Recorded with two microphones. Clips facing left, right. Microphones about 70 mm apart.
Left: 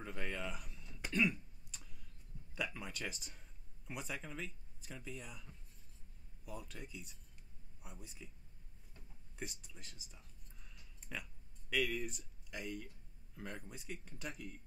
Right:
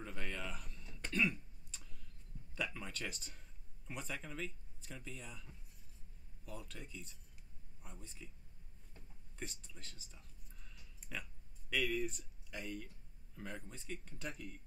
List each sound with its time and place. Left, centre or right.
0.0 s cough: centre
2.5 s speech: centre
9.4 s speech: centre
11.0 s a sound: centre
11.7 s speech: centre